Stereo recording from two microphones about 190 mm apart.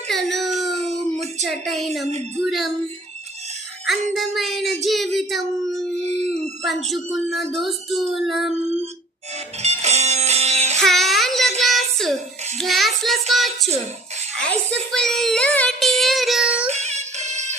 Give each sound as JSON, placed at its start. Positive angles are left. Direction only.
{"t": 0.1, "sound": "a sound", "side_deg": 0}
{"t": 0.8, "sound": "a sound", "side_deg": -35}
{"t": 1.5, "sound": "speech", "side_deg": 0}
{"t": 2.0, "sound": "speech", "side_deg": -35}
{"t": 2.4, "sound": "speech", "side_deg": 0}
{"t": 4.1, "sound": "speech", "side_deg": 0}
{"t": 6.0, "sound": "a sound", "side_deg": -35}
{"t": 6.8, "sound": "speech", "side_deg": 0}
{"t": 9.6, "sound": "music", "side_deg": -35}
{"t": 10.8, "sound": "child singing", "side_deg": 0}
{"t": 11.6, "sound": "a sound", "side_deg": 0}
{"t": 12.5, "sound": "child singing", "side_deg": 0}
{"t": 16.7, "sound": "music", "side_deg": -35}